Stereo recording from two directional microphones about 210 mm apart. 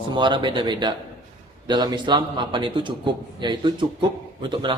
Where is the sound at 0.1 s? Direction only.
20° right (ahead or behind).